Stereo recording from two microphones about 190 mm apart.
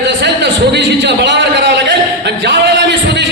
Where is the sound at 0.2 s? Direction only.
65° right (ahead or behind).